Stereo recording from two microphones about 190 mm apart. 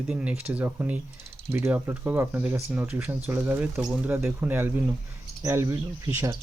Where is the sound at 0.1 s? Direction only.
5° right (ahead or behind).